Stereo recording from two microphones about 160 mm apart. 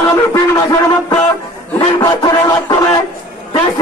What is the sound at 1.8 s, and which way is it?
Music, 25° left (ahead or behind).